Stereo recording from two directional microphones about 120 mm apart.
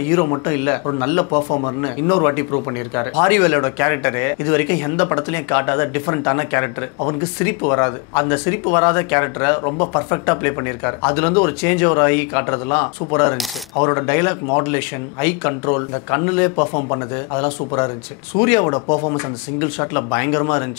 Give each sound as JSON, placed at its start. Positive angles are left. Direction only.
{"t": 0.1, "sound": "speech", "side_deg": 25}